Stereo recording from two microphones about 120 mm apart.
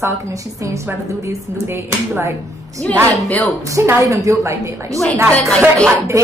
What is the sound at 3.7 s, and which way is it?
A woman's voice, 25° right (ahead or behind).